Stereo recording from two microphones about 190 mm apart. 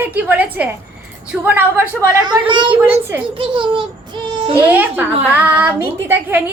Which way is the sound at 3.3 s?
25° right (ahead or behind).